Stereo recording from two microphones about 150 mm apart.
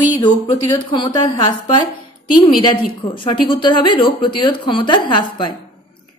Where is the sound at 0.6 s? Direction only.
30° left (ahead or behind).